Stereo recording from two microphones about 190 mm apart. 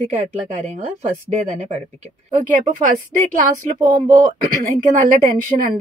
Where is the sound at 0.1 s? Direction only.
40° right (ahead or behind).